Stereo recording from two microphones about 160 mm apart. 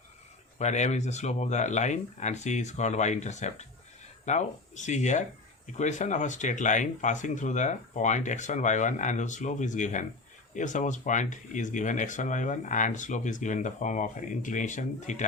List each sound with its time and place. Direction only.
0.6 s speech: 45° left (ahead or behind)